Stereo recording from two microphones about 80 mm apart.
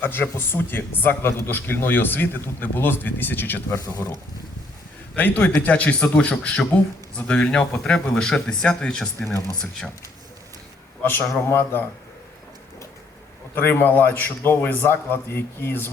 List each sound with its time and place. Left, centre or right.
0.0 s a man's voice: left
3.7 s speech: left
5.1 s a man's voice: left
11.0 s a man's voice: left
13.6 s a man's voice: left